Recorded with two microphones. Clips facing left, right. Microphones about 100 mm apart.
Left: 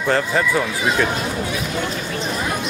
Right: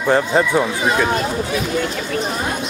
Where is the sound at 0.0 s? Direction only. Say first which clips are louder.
Right 3 dB; 20° right (ahead or behind).